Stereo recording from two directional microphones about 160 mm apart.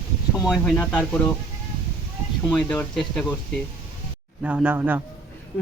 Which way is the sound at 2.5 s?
5° left (ahead or behind).